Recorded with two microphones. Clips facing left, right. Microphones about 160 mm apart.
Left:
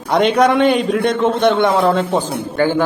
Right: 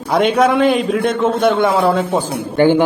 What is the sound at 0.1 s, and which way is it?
A man's voice, 5° right (ahead or behind).